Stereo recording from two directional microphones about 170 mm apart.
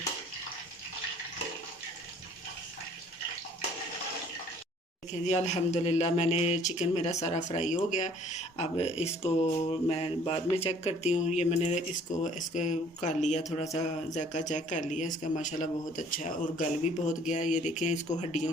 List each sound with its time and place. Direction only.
5.2 s speech: 40° left (ahead or behind)